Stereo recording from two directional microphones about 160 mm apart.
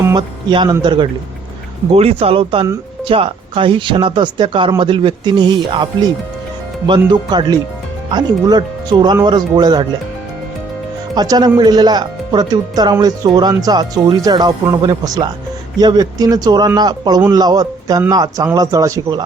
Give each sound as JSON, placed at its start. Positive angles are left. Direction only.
{"t": 0.0, "sound": "speech", "side_deg": -25}
{"t": 11.1, "sound": "speech", "side_deg": -25}